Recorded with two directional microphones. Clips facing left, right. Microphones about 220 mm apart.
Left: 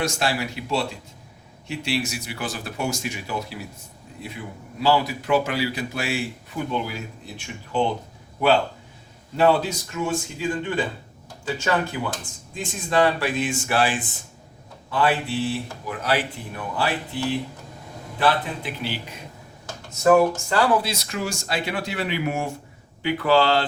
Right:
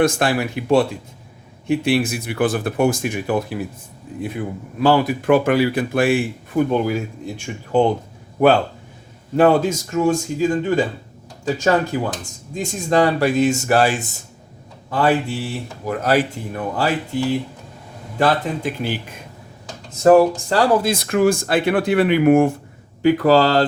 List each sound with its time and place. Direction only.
0.0 s speech: 55° right (ahead or behind)
9.3 s speech: 50° right (ahead or behind)
18.2 s speech: 45° right (ahead or behind)
19.9 s speech: 35° right (ahead or behind)
20.8 s speech: 50° right (ahead or behind)
23.0 s speech: 40° right (ahead or behind)